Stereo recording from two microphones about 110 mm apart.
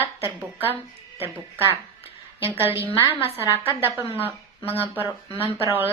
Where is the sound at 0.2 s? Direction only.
20° right (ahead or behind).